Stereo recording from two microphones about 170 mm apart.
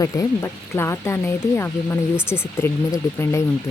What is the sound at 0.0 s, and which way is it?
Speech, 15° left (ahead or behind).